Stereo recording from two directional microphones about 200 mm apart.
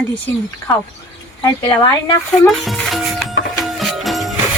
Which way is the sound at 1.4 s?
20° left (ahead or behind).